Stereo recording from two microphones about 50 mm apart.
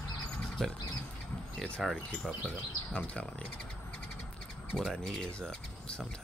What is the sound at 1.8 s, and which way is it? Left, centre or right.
Speech, centre.